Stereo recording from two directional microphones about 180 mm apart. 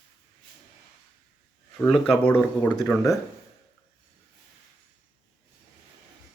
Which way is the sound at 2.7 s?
20° left (ahead or behind).